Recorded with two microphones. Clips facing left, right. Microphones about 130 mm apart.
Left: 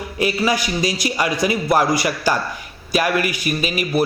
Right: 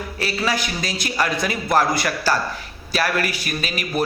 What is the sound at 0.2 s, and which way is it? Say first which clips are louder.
A man's voice: left 5 dB; 15° left (ahead or behind).